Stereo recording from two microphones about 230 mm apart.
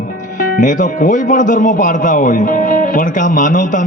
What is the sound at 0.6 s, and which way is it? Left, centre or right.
A man's voice, left.